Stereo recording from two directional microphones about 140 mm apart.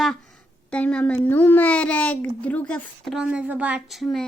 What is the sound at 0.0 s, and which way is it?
Speech, 5° left (ahead or behind).